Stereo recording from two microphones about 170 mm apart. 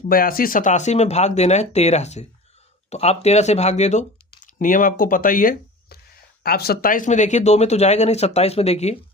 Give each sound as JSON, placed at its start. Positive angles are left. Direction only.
{"t": 0.1, "sound": "speech", "side_deg": 60}